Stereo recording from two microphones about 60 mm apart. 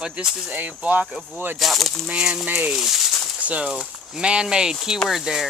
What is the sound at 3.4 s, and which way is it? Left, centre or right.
Speech, right.